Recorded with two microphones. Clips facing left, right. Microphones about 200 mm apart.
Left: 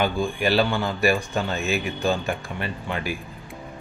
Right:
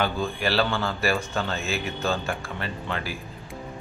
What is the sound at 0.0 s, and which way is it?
Speech, 15° left (ahead or behind).